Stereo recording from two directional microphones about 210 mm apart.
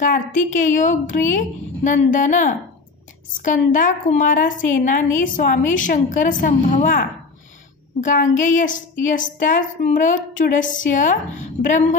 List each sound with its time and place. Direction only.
0.0 s a woman's voice: 40° left (ahead or behind)